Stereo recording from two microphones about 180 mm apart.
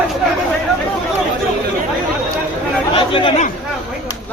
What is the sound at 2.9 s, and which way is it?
Chatter, 30° left (ahead or behind).